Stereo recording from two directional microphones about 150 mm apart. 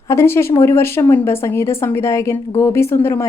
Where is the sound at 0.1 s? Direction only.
15° left (ahead or behind).